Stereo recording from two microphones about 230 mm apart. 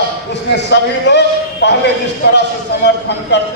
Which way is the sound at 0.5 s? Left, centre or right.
Left.